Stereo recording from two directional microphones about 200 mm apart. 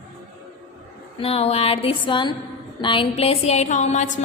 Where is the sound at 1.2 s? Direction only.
30° left (ahead or behind).